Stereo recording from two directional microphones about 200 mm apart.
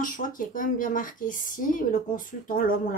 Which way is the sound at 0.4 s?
40° left (ahead or behind).